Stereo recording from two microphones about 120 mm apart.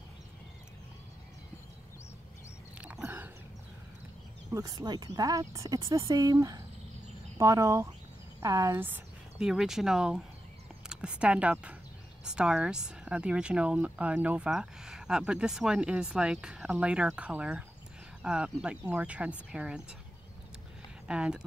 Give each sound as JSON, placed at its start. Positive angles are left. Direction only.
{"t": 2.8, "sound": "a sound", "side_deg": -15}
{"t": 4.5, "sound": "speech", "side_deg": -30}
{"t": 9.4, "sound": "speech", "side_deg": -5}
{"t": 21.1, "sound": "speech", "side_deg": -5}